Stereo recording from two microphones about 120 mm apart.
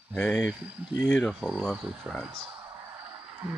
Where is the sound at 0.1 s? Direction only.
5° left (ahead or behind).